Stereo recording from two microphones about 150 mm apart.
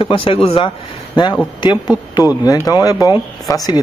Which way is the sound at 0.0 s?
35° left (ahead or behind).